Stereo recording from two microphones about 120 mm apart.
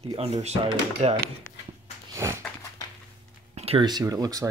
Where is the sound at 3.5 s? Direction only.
55° right (ahead or behind).